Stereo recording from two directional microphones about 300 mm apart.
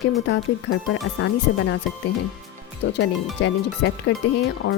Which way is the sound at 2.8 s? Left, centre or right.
Left.